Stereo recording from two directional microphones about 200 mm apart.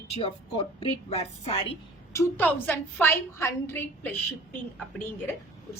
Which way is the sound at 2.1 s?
10° left (ahead or behind).